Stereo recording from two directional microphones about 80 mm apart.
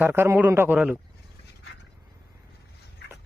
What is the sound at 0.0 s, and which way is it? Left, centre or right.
Speech, right.